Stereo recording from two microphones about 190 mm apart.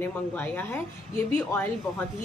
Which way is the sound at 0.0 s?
10° left (ahead or behind).